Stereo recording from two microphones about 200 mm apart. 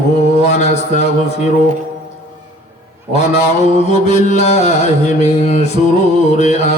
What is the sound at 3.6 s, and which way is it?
Mantra, 35° left (ahead or behind).